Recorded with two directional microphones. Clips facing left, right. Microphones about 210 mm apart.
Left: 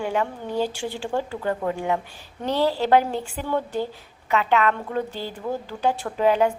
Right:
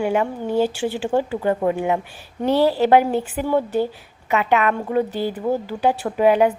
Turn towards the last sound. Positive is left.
turn(degrees=-15)  # may be behind; listen again after turning